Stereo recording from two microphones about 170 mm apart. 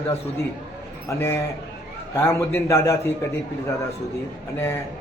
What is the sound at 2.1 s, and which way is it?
Speech, 15° left (ahead or behind).